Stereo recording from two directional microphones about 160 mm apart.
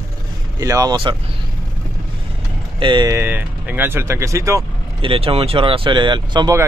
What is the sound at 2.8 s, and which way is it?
Speech, 25° right (ahead or behind).